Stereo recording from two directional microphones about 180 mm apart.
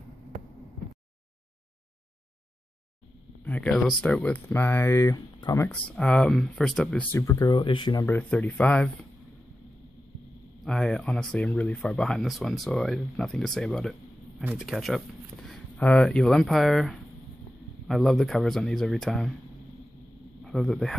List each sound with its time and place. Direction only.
3.4 s speech: 5° left (ahead or behind); by 8.0 s 25° left (ahead or behind)
8.0 s speech: 10° left (ahead or behind)
10.6 s speech: 5° left (ahead or behind)
20.4 s speech: centre (ahead or behind)